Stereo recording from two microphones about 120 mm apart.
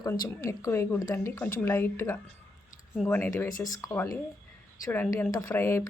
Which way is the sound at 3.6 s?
30° left (ahead or behind).